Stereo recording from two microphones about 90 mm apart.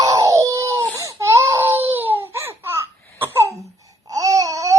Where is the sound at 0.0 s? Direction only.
40° right (ahead or behind).